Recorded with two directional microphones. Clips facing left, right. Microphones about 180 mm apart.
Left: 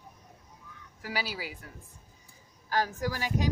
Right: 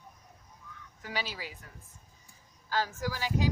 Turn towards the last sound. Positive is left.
turn(degrees=15)  # may be behind; listen again after turning